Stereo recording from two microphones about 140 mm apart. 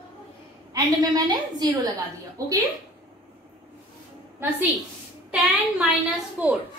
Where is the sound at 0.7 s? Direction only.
25° right (ahead or behind).